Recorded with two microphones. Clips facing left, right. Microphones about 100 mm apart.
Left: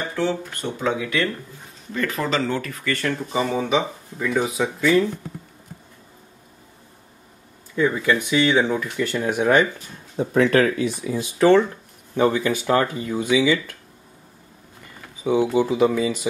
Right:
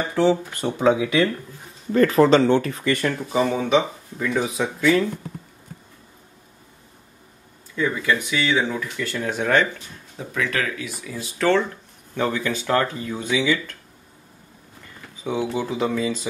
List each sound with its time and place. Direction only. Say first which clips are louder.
0.1 s speech: right 8 dB; 20° right (ahead or behind)
2.0 s speech: right 9 dB; 35° right (ahead or behind); by 3.2 s 15° right (ahead or behind)
3.2 s speech: right 1 dB; centre (ahead or behind)
7.7 s speech: left 3 dB; 30° left (ahead or behind)
10.1 s speech: left 9 dB; 35° left (ahead or behind); by 13.7 s 10° left (ahead or behind)
15.5 s speech: left 5 dB; 10° left (ahead or behind)